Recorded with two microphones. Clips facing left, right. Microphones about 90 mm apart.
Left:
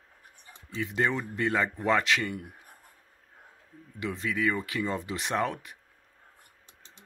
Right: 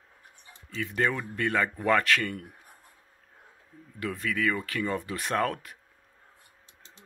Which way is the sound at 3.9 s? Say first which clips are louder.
Even; 20° left (ahead or behind).